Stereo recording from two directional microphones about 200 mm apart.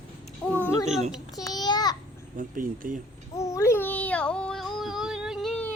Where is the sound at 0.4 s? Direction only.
10° left (ahead or behind).